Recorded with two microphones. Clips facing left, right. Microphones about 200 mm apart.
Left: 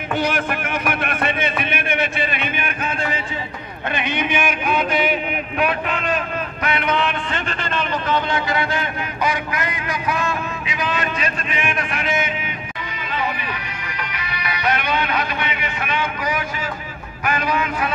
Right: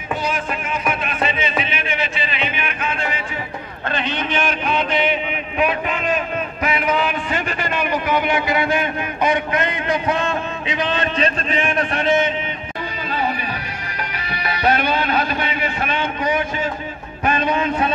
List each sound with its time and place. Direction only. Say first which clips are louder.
0.1 s music: left 2 dB; 70° left (ahead or behind)
3.9 s a sound: even; 15° left (ahead or behind); by 12.3 s 30° right (ahead or behind)
14.1 s music: right 2 dB; 30° right (ahead or behind)